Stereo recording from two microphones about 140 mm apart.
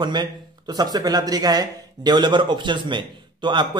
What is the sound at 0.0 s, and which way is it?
Speech, 30° right (ahead or behind).